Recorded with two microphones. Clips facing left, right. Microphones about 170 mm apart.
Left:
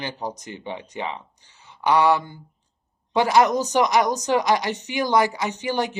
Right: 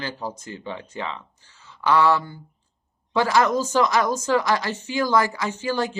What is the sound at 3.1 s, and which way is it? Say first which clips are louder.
A woman's voice: left 2 dB; 20° left (ahead or behind).